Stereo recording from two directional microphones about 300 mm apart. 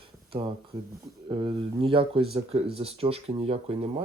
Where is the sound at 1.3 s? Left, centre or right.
Centre.